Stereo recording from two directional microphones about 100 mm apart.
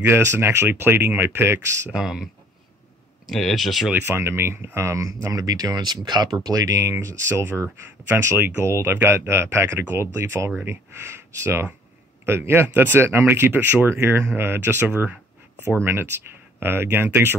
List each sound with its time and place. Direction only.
0.0 s speech: 25° right (ahead or behind)
1.9 s speech: 5° right (ahead or behind)
3.3 s speech: centre (ahead or behind)
3.9 s speech: 20° right (ahead or behind)